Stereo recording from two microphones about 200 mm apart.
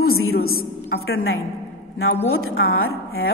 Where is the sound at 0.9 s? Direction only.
75° left (ahead or behind).